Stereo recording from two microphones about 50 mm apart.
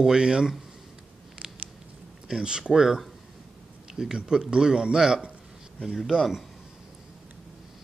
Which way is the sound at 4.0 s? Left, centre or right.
Centre.